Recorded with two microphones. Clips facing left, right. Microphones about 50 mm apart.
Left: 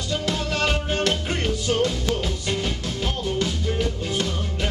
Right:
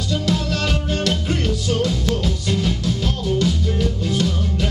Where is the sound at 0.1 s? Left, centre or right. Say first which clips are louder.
Right 3 dB; centre.